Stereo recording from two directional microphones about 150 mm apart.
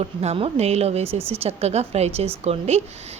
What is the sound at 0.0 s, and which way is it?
A woman's voice, 45° right (ahead or behind).